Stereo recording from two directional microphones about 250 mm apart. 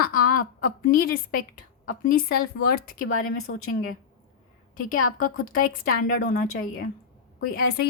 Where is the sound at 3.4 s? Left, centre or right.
Left.